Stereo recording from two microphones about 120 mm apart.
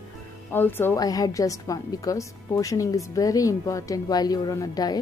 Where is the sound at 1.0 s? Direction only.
30° left (ahead or behind).